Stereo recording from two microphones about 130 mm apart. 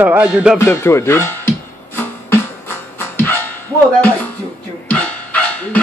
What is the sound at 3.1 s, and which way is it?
Dog, 15° left (ahead or behind).